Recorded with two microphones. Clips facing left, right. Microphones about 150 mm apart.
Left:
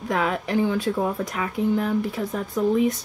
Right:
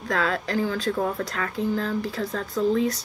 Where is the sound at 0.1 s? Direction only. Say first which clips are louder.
Left 2 dB; 15° left (ahead or behind).